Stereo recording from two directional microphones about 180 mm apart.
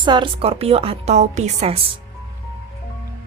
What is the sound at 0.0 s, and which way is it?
A woman's voice, 25° right (ahead or behind).